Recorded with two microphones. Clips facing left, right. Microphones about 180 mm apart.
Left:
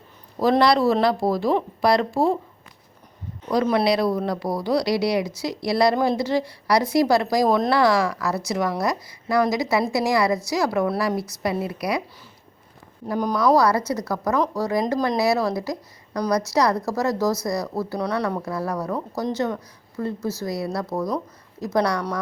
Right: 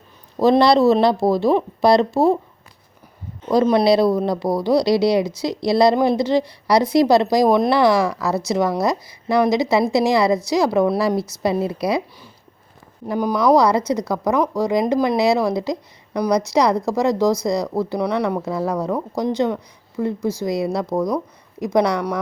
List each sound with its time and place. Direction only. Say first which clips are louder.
0.6 s a woman's voice: right 4 dB; 25° right (ahead or behind)
3.4 s a woman's voice: right 5 dB; 25° right (ahead or behind)
13.1 s speech: right 3 dB; 10° right (ahead or behind)
13.3 s a woman's voice: right 3 dB; 20° right (ahead or behind)